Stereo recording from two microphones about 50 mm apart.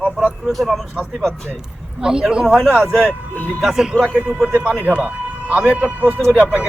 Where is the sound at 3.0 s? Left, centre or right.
Left.